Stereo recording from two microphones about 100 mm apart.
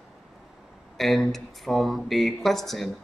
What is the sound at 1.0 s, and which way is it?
A man's voice, centre (ahead or behind).